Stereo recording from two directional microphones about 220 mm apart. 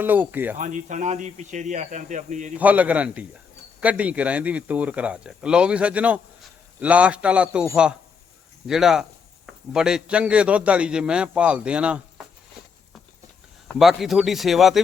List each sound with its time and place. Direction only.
0.0 s a man's voice: 10° right (ahead or behind)
0.5 s speech: 35° right (ahead or behind)
2.6 s a man's voice: 5° right (ahead or behind)
13.7 s speech: centre (ahead or behind)